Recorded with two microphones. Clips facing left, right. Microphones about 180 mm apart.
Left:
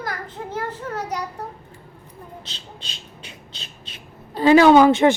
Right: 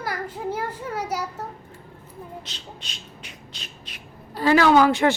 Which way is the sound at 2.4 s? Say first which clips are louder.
Right 1 dB; 30° left (ahead or behind).